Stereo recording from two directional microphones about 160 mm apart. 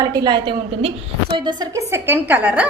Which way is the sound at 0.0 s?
25° right (ahead or behind).